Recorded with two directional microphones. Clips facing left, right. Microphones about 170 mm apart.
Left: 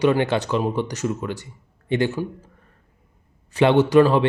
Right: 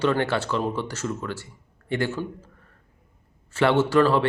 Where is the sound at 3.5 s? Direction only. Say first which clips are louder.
Left 4 dB; 15° left (ahead or behind).